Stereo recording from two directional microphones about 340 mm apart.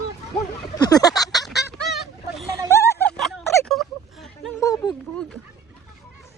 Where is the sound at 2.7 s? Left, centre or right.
Centre.